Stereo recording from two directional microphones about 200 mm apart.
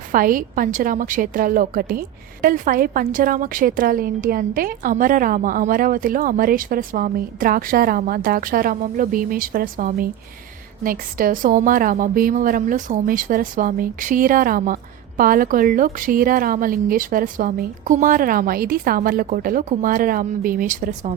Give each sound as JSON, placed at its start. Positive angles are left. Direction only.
{"t": 0.1, "sound": "a woman's voice", "side_deg": -45}